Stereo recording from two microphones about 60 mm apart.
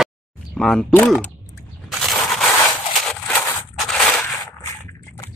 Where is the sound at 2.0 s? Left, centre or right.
Centre.